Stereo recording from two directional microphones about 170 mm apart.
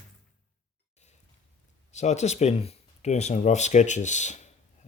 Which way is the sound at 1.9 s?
40° left (ahead or behind).